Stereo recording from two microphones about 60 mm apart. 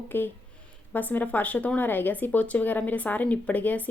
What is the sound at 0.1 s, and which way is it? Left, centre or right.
A woman's voice, left.